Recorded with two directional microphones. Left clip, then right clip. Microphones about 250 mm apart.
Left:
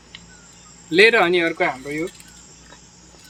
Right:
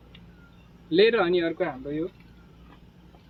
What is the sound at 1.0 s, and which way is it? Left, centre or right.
Speech, left.